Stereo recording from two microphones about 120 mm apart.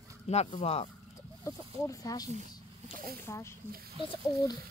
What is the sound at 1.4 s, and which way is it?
Speech, 25° left (ahead or behind).